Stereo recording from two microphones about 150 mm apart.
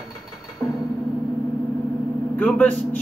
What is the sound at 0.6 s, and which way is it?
Music, 15° left (ahead or behind).